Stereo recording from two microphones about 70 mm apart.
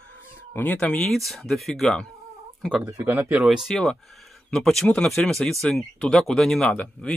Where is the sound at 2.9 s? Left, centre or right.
Right.